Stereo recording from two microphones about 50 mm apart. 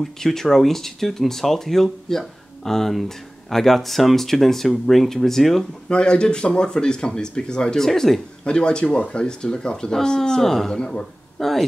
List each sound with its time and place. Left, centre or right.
0.0 s speech: centre
5.9 s speech: centre
8.5 s speech: centre